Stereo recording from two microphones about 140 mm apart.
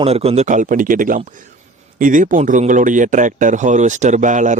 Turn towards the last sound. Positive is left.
turn(degrees=-60)  # may be behind; listen again after turning